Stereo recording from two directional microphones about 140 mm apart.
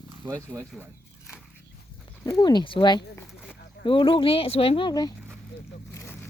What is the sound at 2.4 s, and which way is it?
Speech, 30° left (ahead or behind).